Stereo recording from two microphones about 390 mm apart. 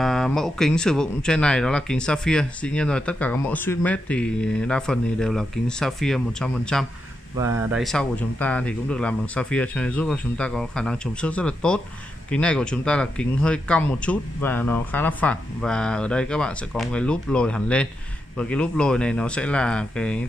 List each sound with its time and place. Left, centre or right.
0.0 s speech: centre